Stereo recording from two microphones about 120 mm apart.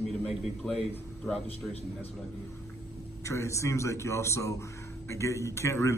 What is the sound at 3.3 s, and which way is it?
Speech, 25° left (ahead or behind).